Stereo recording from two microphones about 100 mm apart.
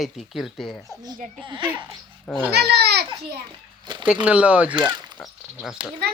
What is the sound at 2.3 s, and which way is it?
Speech, centre (ahead or behind).